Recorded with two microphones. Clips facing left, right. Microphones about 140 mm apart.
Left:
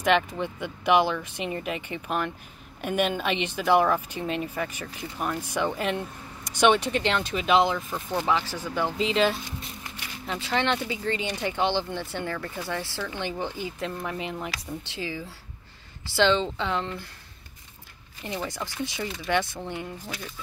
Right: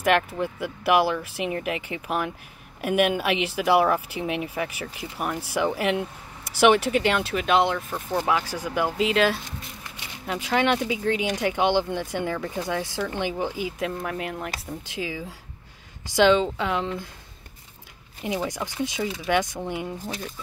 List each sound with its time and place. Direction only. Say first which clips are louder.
0.0 s speech: right 1 dB; 5° right (ahead or behind)
18.2 s speech: right 4 dB; 10° right (ahead or behind)